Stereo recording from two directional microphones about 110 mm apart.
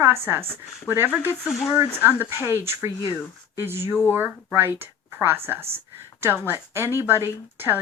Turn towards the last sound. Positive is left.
turn(degrees=-20)  # may be behind; listen again after turning